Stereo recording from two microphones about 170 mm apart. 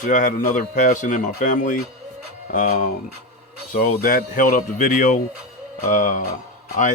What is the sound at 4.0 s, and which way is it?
Speech, 55° left (ahead or behind).